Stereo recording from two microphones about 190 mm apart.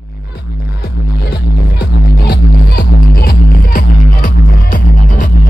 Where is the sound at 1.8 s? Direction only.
50° left (ahead or behind).